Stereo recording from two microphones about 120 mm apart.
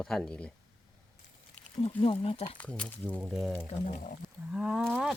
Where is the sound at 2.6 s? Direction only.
10° left (ahead or behind).